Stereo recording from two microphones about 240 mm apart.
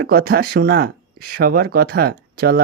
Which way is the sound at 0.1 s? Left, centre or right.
Right.